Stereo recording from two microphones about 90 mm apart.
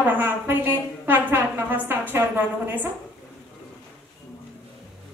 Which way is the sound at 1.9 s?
25° right (ahead or behind).